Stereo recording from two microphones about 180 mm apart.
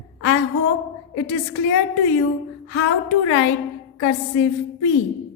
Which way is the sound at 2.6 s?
90° left.